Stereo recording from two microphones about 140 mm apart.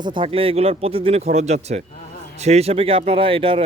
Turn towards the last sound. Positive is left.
turn(degrees=-40)  # may be behind; listen again after turning